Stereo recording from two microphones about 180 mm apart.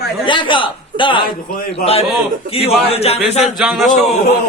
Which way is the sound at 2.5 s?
35° left (ahead or behind).